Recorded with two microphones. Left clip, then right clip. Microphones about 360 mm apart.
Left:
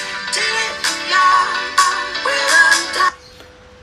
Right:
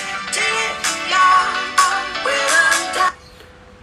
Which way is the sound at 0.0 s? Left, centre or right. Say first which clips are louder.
Left 1 dB; centre.